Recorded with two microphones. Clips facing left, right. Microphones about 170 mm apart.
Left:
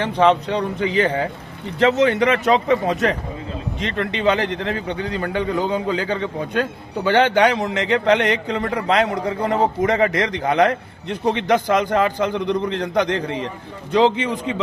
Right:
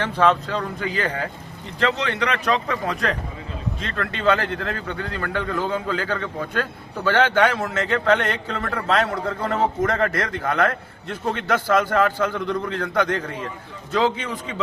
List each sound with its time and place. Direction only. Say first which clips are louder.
0.0 s a man's voice: left 3 dB; 15° left (ahead or behind)